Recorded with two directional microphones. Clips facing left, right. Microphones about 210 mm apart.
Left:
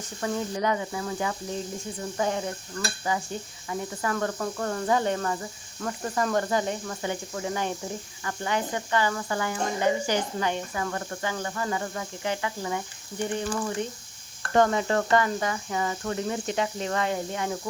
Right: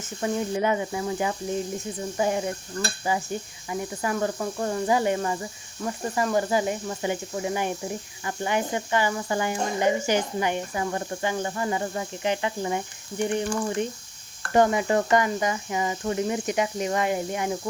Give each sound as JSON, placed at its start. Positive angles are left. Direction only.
{"t": 0.2, "sound": "speech", "side_deg": -15}